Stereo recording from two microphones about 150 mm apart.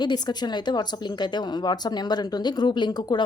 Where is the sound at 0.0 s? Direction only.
30° left (ahead or behind).